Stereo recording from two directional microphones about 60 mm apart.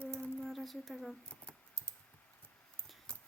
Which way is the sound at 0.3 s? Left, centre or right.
Centre.